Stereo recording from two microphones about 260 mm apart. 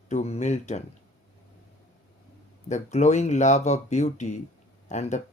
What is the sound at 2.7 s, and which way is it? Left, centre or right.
Speech, left.